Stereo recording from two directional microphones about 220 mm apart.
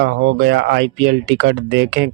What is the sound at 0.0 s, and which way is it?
Speech, 50° right (ahead or behind).